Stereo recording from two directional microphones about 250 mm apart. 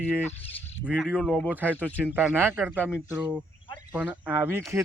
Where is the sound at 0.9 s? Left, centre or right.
Centre.